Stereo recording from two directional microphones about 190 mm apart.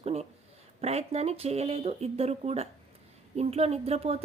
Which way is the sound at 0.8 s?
35° right (ahead or behind).